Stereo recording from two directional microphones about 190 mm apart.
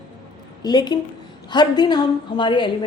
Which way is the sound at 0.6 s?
20° left (ahead or behind).